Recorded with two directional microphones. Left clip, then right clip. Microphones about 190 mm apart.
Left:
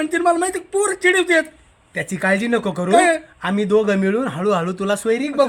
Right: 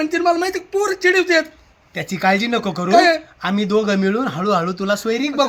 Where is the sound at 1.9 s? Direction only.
15° left (ahead or behind).